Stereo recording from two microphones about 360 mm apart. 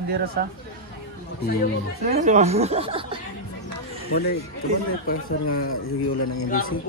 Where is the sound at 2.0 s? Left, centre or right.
Centre.